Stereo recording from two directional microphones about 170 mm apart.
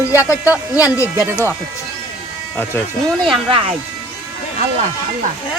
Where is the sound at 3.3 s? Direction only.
30° right (ahead or behind).